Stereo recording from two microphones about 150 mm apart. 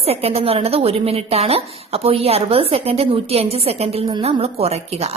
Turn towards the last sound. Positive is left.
turn(degrees=-45)  # may be behind; listen again after turning